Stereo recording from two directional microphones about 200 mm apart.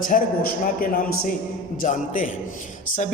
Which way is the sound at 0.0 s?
45° left (ahead or behind).